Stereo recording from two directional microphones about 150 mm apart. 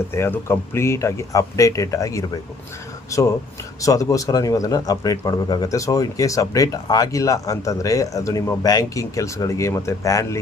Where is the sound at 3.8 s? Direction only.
20° left (ahead or behind).